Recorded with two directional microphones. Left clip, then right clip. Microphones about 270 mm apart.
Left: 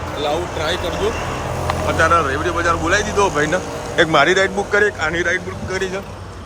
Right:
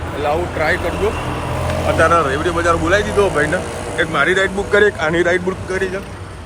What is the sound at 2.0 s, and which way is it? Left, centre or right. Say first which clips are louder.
Speech: right 1 dB; centre.